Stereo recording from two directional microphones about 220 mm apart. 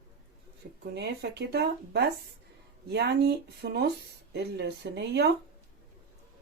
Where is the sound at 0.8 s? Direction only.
50° right (ahead or behind).